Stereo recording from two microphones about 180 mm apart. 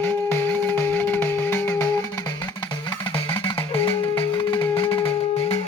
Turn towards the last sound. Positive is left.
turn(degrees=15)  # may be behind; listen again after turning